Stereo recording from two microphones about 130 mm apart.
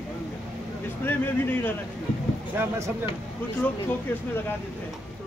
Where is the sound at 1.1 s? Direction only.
15° left (ahead or behind).